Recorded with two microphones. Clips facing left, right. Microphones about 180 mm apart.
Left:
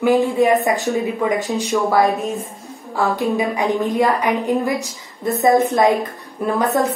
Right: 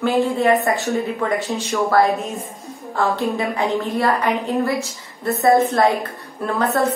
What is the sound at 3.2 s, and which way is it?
A woman's voice, 15° left (ahead or behind).